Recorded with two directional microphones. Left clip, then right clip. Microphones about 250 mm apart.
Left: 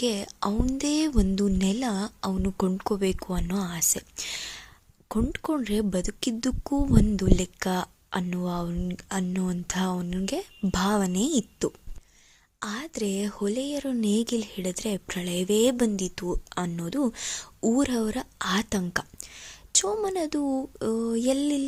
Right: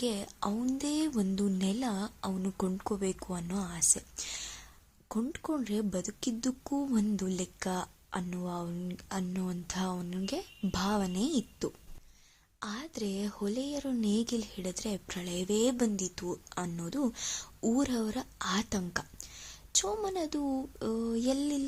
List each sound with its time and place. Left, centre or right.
0.0 s speech: left